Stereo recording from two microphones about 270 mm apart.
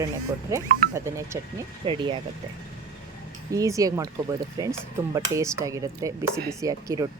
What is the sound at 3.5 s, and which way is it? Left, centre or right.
Speech, centre.